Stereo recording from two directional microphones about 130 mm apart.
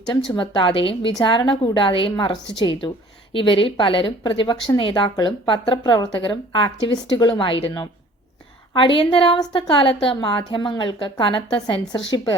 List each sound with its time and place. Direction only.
0.3 s speech: 40° left (ahead or behind)